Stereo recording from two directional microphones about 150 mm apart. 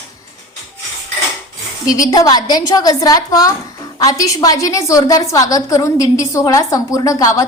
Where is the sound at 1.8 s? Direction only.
20° left (ahead or behind).